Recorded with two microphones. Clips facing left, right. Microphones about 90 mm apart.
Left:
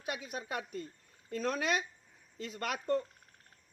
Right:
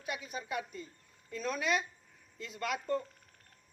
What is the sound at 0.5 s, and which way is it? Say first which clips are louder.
Speech: right 1 dB; 60° left (ahead or behind).